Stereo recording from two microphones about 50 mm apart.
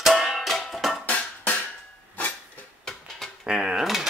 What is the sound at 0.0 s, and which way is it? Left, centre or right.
Music, centre.